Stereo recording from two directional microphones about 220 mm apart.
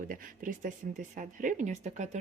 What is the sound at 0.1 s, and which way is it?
Speech, 40° right (ahead or behind).